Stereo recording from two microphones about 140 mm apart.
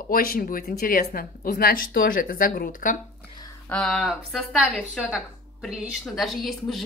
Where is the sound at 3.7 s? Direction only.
5° left (ahead or behind).